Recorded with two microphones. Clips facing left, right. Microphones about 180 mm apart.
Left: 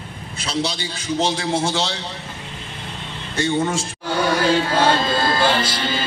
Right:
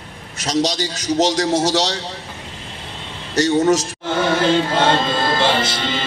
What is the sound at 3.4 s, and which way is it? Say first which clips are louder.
Speech: right 6 dB; 40° right (ahead or behind).